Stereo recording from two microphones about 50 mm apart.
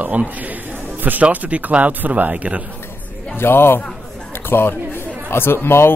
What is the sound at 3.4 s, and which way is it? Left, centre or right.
Speech, left.